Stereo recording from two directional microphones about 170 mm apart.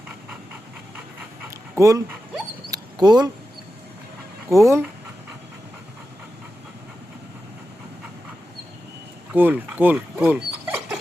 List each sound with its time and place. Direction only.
1.7 s speech: 20° right (ahead or behind)
2.6 s dog: 25° right (ahead or behind)
4.4 s speech: 15° right (ahead or behind)
9.3 s speech: 10° right (ahead or behind)